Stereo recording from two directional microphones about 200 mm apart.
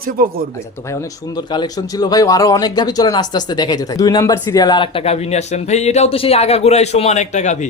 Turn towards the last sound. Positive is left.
turn(degrees=35)  # may be behind; listen again after turning